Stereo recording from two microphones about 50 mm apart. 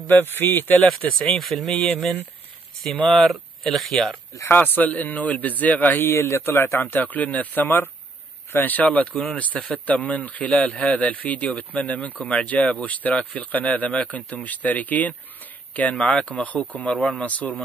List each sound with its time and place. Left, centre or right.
0.0 s speech: left
0.8 s speech: centre
3.0 s speech: left
3.6 s speech: centre
4.5 s speech: left
6.0 s a man's voice: left
6.8 s speech: left